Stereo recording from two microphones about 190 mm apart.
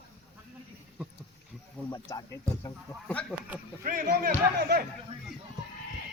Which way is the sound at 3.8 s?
45° right (ahead or behind).